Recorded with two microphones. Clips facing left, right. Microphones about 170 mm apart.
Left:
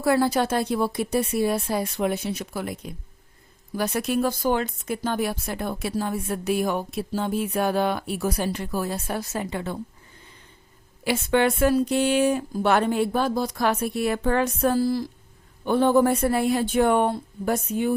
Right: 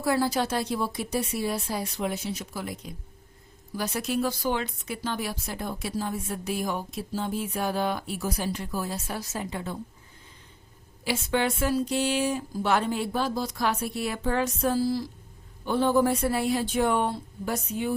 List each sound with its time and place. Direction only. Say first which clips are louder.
0.0 s speech: left 4 dB; 60° left (ahead or behind)
11.0 s speech: left 5 dB; 60° left (ahead or behind)